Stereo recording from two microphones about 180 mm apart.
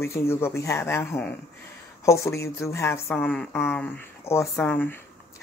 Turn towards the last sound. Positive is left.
turn(degrees=10)  # may be behind; listen again after turning